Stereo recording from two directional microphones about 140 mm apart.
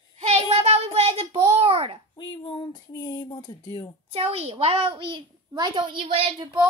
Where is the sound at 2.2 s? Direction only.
30° left (ahead or behind).